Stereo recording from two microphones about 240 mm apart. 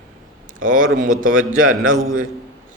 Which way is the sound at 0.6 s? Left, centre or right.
Right.